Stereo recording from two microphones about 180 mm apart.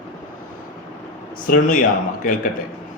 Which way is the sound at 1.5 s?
50° left (ahead or behind).